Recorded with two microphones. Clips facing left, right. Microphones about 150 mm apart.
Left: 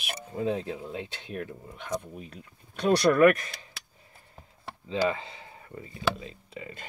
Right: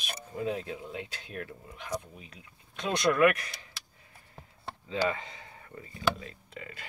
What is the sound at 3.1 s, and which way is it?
Speech, 40° left (ahead or behind).